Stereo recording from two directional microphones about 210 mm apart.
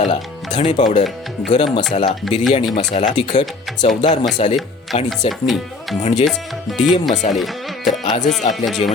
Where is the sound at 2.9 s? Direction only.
30° left (ahead or behind).